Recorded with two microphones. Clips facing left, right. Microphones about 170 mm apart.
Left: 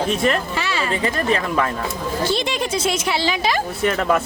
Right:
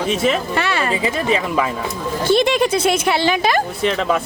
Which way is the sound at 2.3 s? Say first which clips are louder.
Right 7 dB; 55° right (ahead or behind).